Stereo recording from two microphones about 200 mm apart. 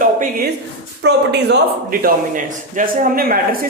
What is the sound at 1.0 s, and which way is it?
Speech, 55° right (ahead or behind).